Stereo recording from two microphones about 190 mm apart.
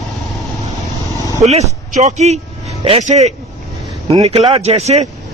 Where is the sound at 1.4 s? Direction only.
35° right (ahead or behind).